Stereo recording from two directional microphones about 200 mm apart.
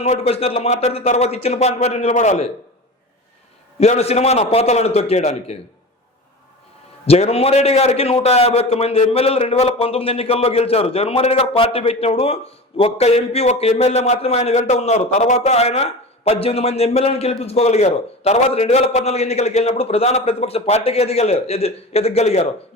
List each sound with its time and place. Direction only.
0.0 s a man's voice: 30° left (ahead or behind)
3.8 s a man's voice: 35° left (ahead or behind)
7.0 s a man's voice: 30° left (ahead or behind)